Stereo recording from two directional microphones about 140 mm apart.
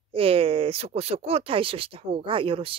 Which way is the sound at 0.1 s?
45° right (ahead or behind).